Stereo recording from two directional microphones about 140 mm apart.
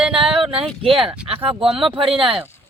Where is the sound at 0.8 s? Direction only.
40° right (ahead or behind).